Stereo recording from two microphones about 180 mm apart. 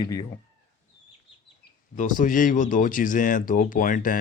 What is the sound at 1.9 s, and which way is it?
Speech, 45° left (ahead or behind).